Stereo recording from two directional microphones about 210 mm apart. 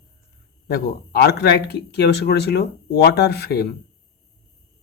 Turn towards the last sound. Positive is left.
turn(degrees=50)  # may be behind; listen again after turning